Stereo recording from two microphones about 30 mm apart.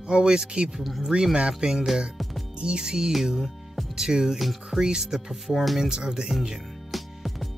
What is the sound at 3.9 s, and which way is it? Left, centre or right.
Speech, centre.